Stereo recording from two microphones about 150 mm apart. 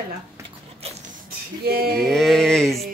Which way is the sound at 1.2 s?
90° right.